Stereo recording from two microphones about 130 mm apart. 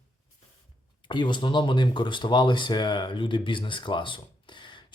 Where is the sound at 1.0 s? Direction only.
35° left (ahead or behind).